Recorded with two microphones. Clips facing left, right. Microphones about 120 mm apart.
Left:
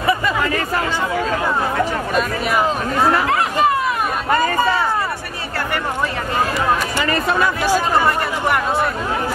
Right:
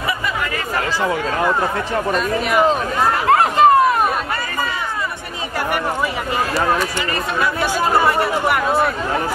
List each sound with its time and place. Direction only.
3.3 s chatter: 45° right (ahead or behind)